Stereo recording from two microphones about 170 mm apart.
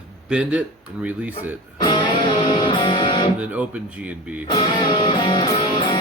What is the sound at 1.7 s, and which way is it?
Music, 25° left (ahead or behind).